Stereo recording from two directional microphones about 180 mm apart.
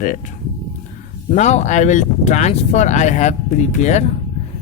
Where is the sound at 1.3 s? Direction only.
40° left (ahead or behind).